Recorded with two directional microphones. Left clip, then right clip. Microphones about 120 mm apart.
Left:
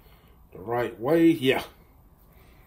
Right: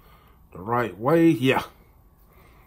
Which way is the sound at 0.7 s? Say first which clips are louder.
Right 3 dB; 35° right (ahead or behind).